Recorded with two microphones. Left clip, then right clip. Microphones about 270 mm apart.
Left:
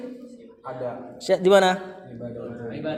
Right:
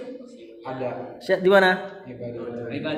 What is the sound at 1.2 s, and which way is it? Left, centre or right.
Speech, left.